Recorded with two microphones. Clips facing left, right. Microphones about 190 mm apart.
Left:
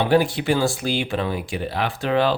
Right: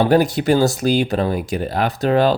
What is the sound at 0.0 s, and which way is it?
Speech, 40° right (ahead or behind).